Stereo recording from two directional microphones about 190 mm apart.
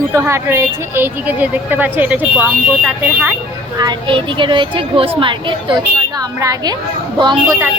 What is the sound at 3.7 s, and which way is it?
Speech, 25° right (ahead or behind).